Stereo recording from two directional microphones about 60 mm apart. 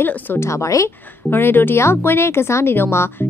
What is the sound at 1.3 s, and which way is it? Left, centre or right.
Speech, left.